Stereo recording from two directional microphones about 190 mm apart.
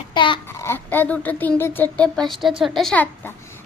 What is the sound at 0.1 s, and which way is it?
Speech, 25° left (ahead or behind).